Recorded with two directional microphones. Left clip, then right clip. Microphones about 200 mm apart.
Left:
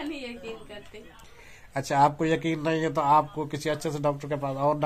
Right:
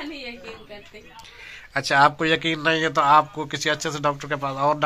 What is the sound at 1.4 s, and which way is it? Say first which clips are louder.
A man's voice: right 7 dB; 5° left (ahead or behind).